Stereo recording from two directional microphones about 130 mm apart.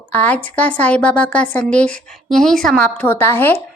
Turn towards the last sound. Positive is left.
turn(degrees=15)  # may be behind; listen again after turning